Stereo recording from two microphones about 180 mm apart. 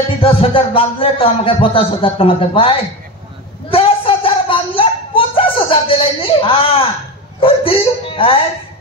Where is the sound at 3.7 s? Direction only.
30° left (ahead or behind).